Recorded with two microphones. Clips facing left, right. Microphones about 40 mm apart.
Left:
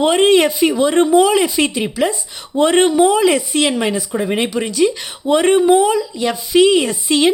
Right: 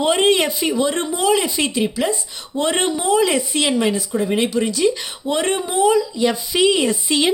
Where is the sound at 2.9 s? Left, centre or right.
Left.